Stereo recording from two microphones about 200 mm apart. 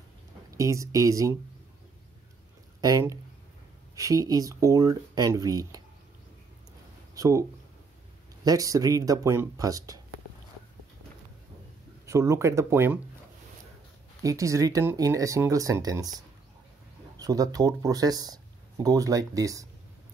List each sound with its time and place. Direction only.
0.5 s speech: 15° right (ahead or behind)
2.8 s speech: 15° right (ahead or behind)
7.2 s speech: 15° right (ahead or behind)
8.5 s speech: 15° right (ahead or behind)
12.1 s speech: 15° right (ahead or behind)
14.2 s speech: 15° right (ahead or behind)
17.2 s speech: 20° right (ahead or behind)